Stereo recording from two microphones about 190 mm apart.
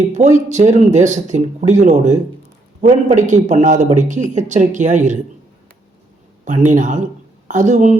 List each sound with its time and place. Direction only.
0.1 s speech: 40° right (ahead or behind)
6.4 s a woman's voice: 40° right (ahead or behind)